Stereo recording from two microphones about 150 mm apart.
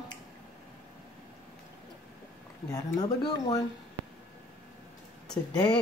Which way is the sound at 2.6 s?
25° left (ahead or behind).